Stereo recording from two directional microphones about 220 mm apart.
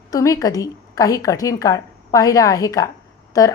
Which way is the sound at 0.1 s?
15° left (ahead or behind).